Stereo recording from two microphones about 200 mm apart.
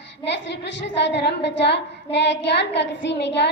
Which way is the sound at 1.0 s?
55° left (ahead or behind).